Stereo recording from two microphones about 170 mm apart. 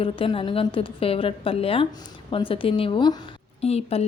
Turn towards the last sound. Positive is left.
turn(degrees=35)  # may be behind; listen again after turning